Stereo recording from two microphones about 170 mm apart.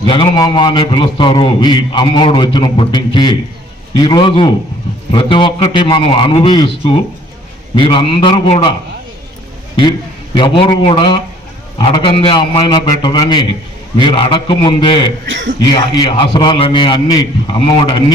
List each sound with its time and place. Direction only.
0.1 s a man's voice: 25° left (ahead or behind)
10.3 s a man's voice: 25° left (ahead or behind)
15.3 s speech: 90° right
15.6 s a man's voice: 25° left (ahead or behind)